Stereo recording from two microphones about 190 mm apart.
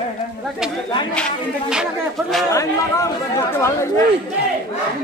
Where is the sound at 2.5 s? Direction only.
15° left (ahead or behind).